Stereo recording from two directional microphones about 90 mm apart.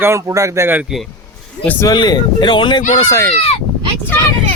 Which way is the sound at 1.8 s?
50° left (ahead or behind).